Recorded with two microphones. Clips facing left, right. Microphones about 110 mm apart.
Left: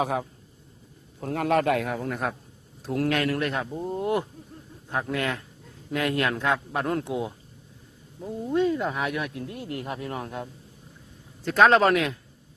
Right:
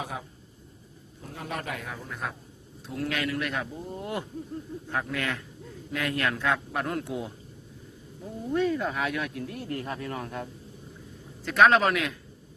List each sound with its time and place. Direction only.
0.0 s a man's voice: 65° left (ahead or behind)
3.2 s speech: 40° left (ahead or behind); by 7.3 s 25° left (ahead or behind)
8.4 s speech: 25° left (ahead or behind)